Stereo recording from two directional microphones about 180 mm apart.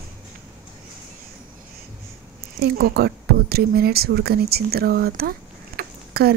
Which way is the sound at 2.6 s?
60° right (ahead or behind).